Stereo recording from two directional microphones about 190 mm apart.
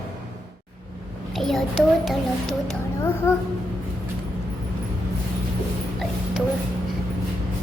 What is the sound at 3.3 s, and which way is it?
Speech, 15° left (ahead or behind).